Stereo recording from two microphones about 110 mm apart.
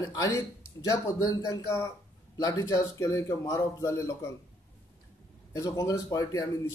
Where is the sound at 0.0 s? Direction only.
35° left (ahead or behind).